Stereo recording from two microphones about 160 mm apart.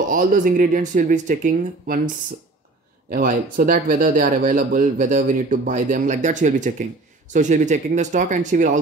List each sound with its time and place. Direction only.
0.1 s speech: 55° right (ahead or behind)
3.1 s speech: 65° right (ahead or behind)